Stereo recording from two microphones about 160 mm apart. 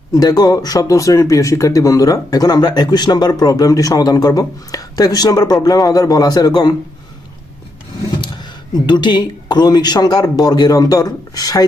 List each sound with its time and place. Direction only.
0.1 s speech: 20° left (ahead or behind)
8.2 s speech: 30° left (ahead or behind)